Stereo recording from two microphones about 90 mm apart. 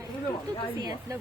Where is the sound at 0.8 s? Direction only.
50° right (ahead or behind).